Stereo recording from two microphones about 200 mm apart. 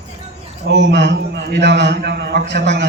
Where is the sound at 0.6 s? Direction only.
60° right (ahead or behind).